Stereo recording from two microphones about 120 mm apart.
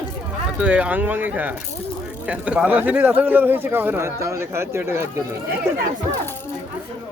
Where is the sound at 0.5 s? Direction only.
10° right (ahead or behind).